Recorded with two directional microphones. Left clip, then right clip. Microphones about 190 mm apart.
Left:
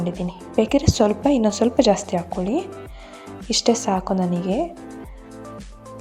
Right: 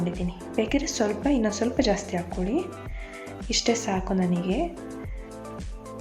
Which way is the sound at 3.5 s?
30° left (ahead or behind).